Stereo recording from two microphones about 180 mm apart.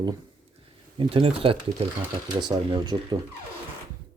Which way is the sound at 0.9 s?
30° right (ahead or behind).